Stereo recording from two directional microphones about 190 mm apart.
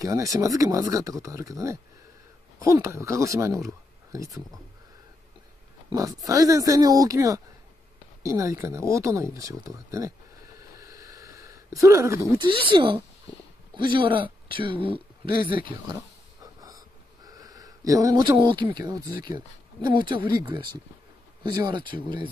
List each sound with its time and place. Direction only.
0.0 s speech: 15° right (ahead or behind)
5.9 s speech: 20° right (ahead or behind)
10.8 s a sound: 20° right (ahead or behind)
13.7 s speech: 25° right (ahead or behind)
16.6 s a sound: 20° right (ahead or behind)
19.2 s speech: 20° right (ahead or behind)